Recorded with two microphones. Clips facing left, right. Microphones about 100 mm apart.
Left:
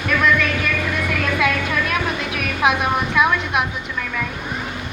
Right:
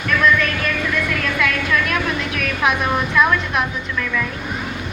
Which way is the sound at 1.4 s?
20° left (ahead or behind).